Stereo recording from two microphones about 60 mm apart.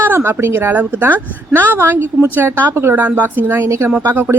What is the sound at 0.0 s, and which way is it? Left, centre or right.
A woman's voice, right.